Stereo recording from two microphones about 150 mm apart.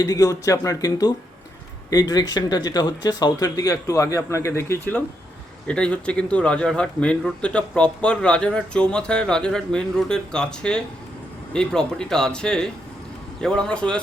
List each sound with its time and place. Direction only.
0.0 s speech: 25° left (ahead or behind); by 14.0 s 5° left (ahead or behind)